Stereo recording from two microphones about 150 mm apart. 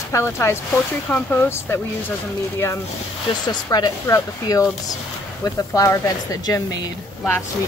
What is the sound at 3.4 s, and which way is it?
Speech, 30° left (ahead or behind).